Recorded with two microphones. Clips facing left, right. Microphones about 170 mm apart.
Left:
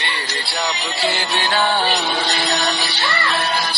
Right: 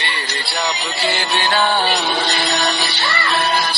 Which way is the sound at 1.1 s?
65° right (ahead or behind).